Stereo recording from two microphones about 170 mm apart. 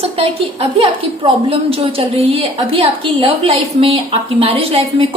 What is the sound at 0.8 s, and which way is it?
A woman's voice, 30° right (ahead or behind).